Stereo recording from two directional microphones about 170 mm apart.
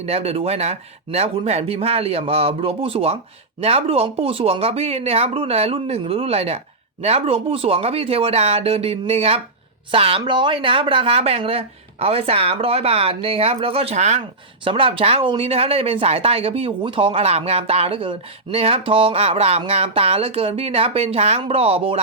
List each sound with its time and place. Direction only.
0.0 s speech: 35° right (ahead or behind)